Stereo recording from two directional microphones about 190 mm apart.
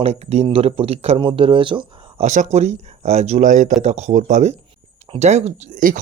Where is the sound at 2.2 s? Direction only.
40° right (ahead or behind).